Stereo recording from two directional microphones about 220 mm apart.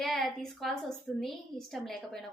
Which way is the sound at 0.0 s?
Centre (ahead or behind).